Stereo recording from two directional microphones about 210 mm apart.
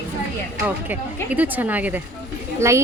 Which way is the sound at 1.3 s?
10° right (ahead or behind).